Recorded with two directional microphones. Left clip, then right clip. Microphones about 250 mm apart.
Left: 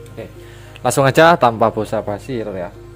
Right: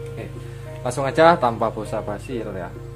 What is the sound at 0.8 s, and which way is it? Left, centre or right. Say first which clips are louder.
Speech: left 5 dB; left.